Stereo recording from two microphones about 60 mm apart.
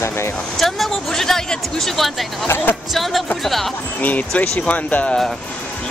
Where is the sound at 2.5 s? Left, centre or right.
Left.